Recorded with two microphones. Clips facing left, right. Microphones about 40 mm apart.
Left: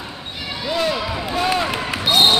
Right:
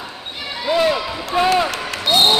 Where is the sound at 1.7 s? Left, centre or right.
Centre.